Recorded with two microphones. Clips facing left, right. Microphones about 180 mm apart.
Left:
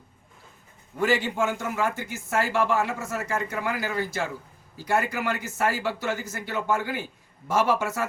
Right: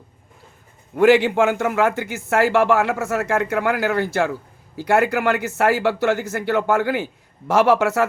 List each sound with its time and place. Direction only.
0.9 s speech: 75° right (ahead or behind)